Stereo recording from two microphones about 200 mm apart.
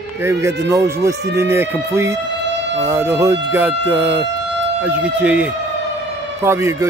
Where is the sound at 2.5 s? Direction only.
60° right (ahead or behind).